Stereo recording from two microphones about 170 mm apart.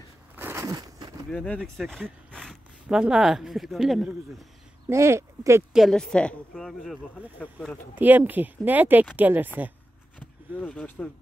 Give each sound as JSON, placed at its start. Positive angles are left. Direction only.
{"t": 0.4, "sound": "a sound", "side_deg": -15}
{"t": 1.3, "sound": "speech", "side_deg": 5}
{"t": 4.8, "sound": "speech", "side_deg": -15}
{"t": 5.7, "sound": "speech", "side_deg": 0}
{"t": 7.9, "sound": "speech", "side_deg": -10}
{"t": 10.1, "sound": "a sound", "side_deg": 10}